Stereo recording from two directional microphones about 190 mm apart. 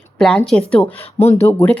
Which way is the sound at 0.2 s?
5° left (ahead or behind).